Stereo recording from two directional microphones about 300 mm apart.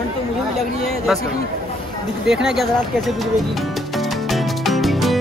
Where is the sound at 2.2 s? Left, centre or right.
Centre.